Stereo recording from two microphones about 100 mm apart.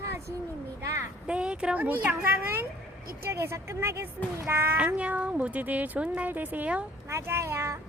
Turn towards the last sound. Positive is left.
turn(degrees=-30)  # may be behind; listen again after turning